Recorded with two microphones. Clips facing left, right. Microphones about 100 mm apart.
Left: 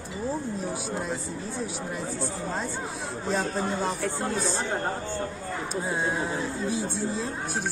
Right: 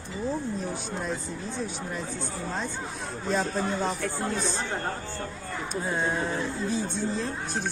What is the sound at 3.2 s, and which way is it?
Speech, 15° left (ahead or behind).